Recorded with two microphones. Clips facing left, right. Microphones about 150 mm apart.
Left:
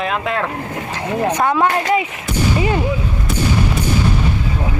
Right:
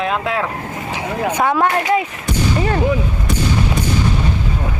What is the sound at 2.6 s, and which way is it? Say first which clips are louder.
Speech: left 1 dB; 10° left (ahead or behind).